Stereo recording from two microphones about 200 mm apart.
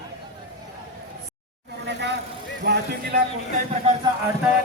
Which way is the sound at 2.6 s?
55° right (ahead or behind).